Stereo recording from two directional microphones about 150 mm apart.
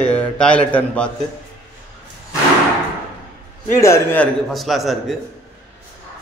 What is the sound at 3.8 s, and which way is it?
Speech, 15° left (ahead or behind).